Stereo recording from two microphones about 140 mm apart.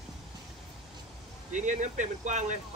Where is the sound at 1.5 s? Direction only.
60° right (ahead or behind).